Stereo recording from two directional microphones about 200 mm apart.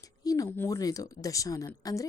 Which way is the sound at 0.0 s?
15° left (ahead or behind).